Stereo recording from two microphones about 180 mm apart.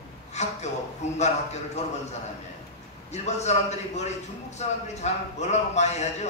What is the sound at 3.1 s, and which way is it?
A man's voice, 40° left (ahead or behind).